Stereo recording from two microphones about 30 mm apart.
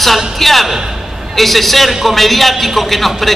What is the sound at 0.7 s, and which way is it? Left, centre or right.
Speech, centre.